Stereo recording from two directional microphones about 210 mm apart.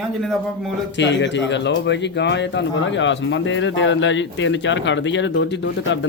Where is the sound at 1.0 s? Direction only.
55° left (ahead or behind).